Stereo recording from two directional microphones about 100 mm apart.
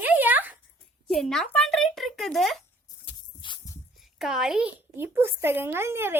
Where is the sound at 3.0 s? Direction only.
55° left (ahead or behind).